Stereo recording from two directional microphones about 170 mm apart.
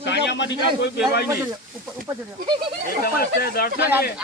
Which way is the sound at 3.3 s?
60° left (ahead or behind).